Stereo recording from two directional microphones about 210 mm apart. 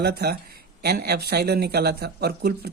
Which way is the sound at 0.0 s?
50° right (ahead or behind).